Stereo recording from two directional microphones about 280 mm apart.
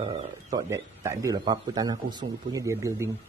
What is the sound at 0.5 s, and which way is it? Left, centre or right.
A man's voice, centre.